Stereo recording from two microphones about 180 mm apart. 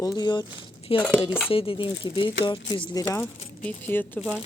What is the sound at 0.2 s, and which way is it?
Speech, 25° left (ahead or behind).